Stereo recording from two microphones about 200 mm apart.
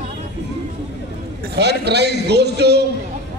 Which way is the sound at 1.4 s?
55° right (ahead or behind).